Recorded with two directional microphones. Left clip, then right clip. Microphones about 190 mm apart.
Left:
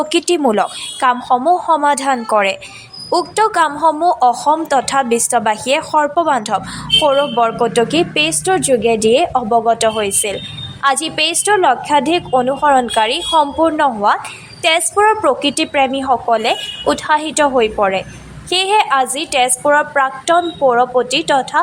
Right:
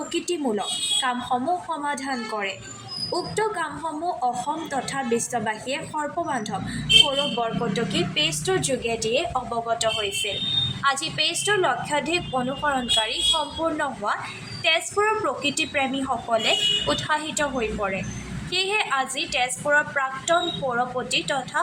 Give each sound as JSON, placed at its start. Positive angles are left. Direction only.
{"t": 0.1, "sound": "a woman's voice", "side_deg": 55}